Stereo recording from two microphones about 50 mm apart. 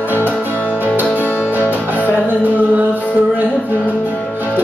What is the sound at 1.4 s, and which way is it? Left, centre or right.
Music, right.